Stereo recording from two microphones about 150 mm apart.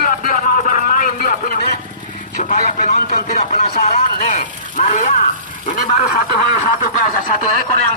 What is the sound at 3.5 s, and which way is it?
Speech, 50° left (ahead or behind).